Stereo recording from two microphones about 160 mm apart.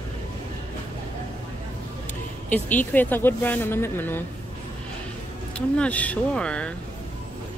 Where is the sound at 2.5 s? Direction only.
10° left (ahead or behind).